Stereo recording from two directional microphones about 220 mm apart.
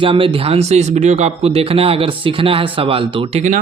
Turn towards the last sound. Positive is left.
turn(degrees=-30)  # may be behind; listen again after turning